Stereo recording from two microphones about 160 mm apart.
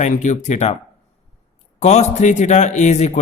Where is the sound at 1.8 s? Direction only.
45° left (ahead or behind).